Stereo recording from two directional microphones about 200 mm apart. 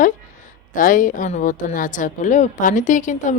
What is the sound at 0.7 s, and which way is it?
A woman's voice, 40° left (ahead or behind).